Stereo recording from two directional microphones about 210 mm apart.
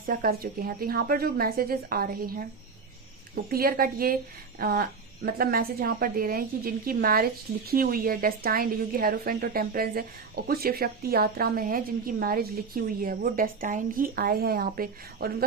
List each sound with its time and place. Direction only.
0.0 s a woman's voice: 40° right (ahead or behind)
3.5 s a woman's voice: 45° right (ahead or behind)